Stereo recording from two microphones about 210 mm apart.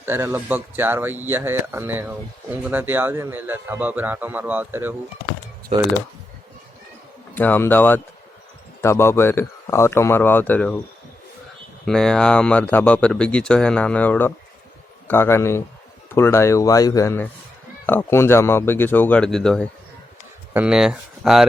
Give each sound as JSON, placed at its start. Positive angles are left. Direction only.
{"t": 0.0, "sound": "a man's voice", "side_deg": -10}
{"t": 5.7, "sound": "speech", "side_deg": -30}
{"t": 7.3, "sound": "a man's voice", "side_deg": 10}
{"t": 11.9, "sound": "a man's voice", "side_deg": 0}